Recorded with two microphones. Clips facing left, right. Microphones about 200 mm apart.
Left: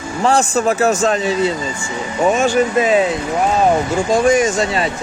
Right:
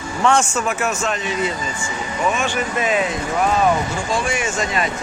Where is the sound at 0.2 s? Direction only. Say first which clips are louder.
Left 3 dB; 35° left (ahead or behind).